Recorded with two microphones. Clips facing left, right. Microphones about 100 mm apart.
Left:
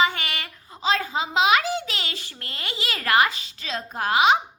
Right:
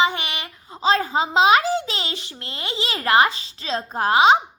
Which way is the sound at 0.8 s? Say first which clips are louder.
Right 5 dB; 35° right (ahead or behind).